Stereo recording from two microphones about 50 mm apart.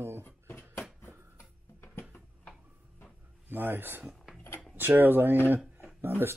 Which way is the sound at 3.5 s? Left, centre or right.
Right.